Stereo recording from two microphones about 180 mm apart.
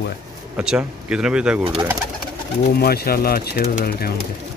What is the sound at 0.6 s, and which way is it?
Speech, 5° right (ahead or behind).